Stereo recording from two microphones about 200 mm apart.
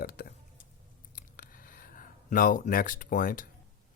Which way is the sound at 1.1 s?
45° left (ahead or behind).